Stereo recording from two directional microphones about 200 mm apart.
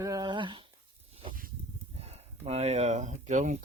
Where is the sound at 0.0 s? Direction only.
20° right (ahead or behind).